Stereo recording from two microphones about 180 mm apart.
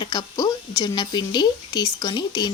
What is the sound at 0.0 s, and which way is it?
Speech, 25° left (ahead or behind).